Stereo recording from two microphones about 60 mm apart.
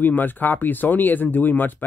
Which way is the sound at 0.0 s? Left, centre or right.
Left.